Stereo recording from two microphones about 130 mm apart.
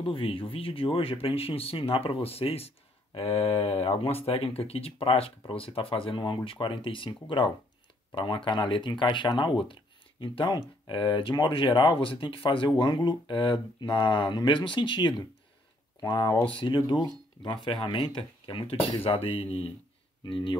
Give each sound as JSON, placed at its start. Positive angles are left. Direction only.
{"t": 0.0, "sound": "speech", "side_deg": 40}